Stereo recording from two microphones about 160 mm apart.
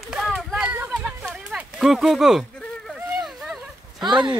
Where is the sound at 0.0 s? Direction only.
5° right (ahead or behind).